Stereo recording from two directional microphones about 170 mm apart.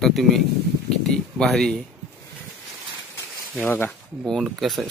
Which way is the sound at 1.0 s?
5° left (ahead or behind).